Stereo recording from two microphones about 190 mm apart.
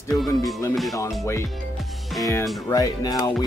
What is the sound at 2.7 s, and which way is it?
Speech, 20° left (ahead or behind).